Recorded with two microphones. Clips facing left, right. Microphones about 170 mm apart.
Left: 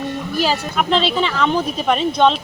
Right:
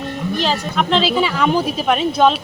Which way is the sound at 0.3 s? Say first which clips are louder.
Left 1 dB; 5° left (ahead or behind).